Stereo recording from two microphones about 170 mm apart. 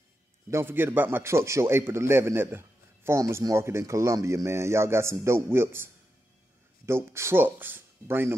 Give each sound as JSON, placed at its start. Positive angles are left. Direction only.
{"t": 0.5, "sound": "a man's voice", "side_deg": -15}
{"t": 6.9, "sound": "a man's voice", "side_deg": -15}